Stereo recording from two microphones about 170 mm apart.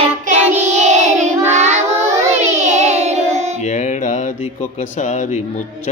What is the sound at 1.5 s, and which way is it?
Child singing, 40° right (ahead or behind).